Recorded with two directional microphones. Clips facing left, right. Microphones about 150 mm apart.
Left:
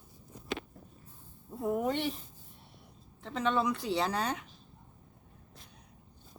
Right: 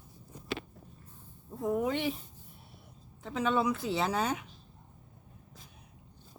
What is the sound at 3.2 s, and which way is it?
A woman's voice, 5° right (ahead or behind).